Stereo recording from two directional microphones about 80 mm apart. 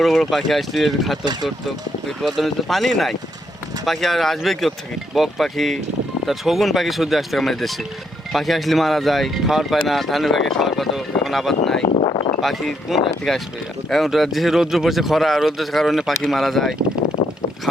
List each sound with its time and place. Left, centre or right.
0.0 s speech: centre
1.2 s speech: right
1.5 s speech: centre